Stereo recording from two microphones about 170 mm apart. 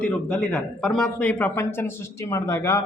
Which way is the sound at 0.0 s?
5° left (ahead or behind).